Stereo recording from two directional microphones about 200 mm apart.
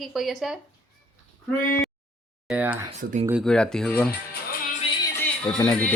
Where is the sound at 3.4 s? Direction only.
5° left (ahead or behind).